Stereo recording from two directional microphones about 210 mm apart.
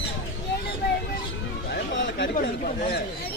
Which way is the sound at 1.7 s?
55° left (ahead or behind).